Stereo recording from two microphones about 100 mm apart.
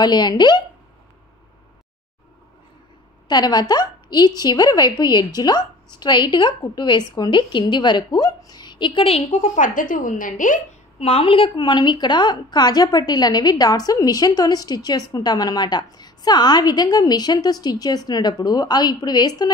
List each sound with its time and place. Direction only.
0.0 s a woman's voice: 45° left (ahead or behind)
3.3 s a woman's voice: 45° left (ahead or behind); by 9.4 s 85° left
11.0 s a woman's voice: 70° left (ahead or behind); by 19.5 s 40° left (ahead or behind)